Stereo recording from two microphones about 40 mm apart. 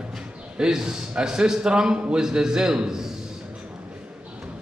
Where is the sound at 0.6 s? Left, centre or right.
Centre.